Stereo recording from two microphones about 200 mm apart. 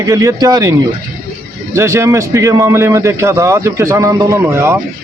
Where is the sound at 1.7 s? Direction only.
15° right (ahead or behind).